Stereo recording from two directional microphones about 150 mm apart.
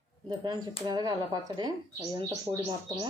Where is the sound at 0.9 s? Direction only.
25° right (ahead or behind).